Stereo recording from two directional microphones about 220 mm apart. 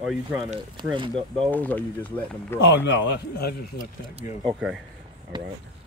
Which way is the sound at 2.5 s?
55° left (ahead or behind).